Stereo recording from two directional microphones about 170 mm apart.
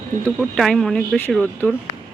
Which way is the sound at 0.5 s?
Centre (ahead or behind).